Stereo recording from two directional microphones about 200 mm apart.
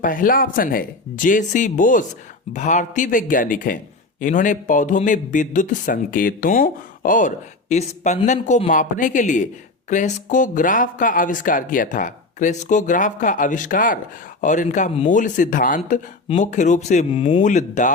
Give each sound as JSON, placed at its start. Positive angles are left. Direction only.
{"t": 0.0, "sound": "speech", "side_deg": 45}